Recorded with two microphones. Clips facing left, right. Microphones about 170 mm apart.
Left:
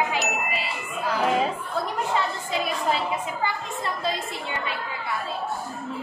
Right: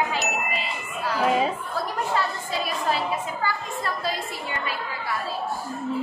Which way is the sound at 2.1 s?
20° left (ahead or behind).